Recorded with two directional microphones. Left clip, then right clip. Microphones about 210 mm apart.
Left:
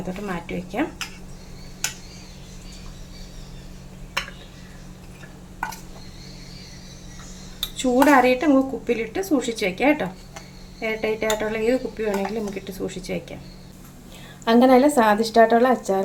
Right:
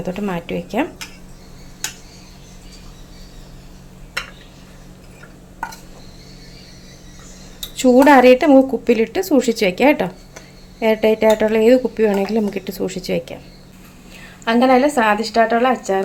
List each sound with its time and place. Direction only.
0.1 s speech: 45° right (ahead or behind)
7.8 s speech: 40° right (ahead or behind)
14.4 s a woman's voice: 5° left (ahead or behind)